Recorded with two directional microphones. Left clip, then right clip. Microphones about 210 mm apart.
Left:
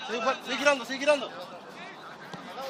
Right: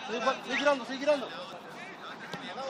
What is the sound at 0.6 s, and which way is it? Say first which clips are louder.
Speech: left 4 dB; 30° left (ahead or behind).